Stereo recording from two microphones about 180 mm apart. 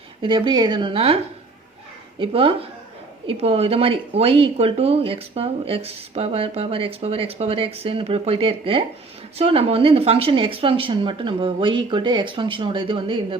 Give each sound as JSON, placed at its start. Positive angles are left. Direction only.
{"t": 0.2, "sound": "speech", "side_deg": -30}